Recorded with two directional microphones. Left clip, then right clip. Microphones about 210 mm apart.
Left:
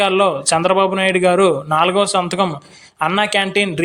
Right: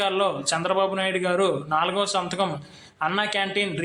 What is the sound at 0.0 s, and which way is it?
A man's voice, 35° left (ahead or behind).